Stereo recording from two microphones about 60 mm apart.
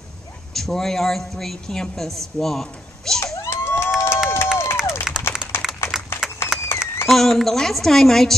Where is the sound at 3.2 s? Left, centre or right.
Left.